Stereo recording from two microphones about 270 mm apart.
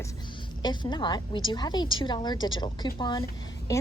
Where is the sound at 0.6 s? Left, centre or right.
Centre.